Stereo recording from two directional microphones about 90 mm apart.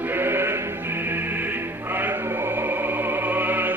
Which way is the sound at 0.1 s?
25° right (ahead or behind).